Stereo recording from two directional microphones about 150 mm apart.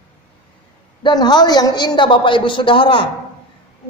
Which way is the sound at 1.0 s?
30° left (ahead or behind).